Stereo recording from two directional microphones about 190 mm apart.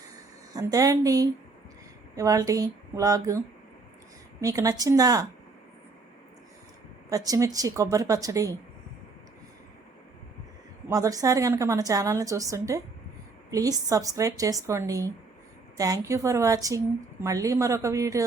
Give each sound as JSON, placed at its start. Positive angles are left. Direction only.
{"t": 0.5, "sound": "a woman's voice", "side_deg": -20}
{"t": 7.1, "sound": "a woman's voice", "side_deg": -20}
{"t": 10.8, "sound": "a woman's voice", "side_deg": -15}